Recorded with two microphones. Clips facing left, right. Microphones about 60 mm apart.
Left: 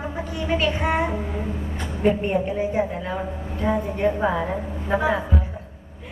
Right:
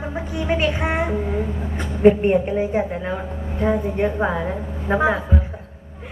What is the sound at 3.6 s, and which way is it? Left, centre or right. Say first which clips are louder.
A woman's voice: right 2 dB; centre.